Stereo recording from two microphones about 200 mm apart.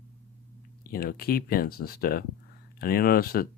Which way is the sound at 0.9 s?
50° left (ahead or behind).